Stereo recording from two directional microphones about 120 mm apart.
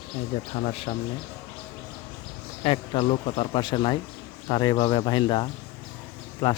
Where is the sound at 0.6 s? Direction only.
55° left (ahead or behind).